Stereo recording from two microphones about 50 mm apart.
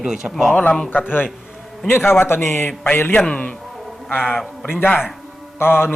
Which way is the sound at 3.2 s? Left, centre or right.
Left.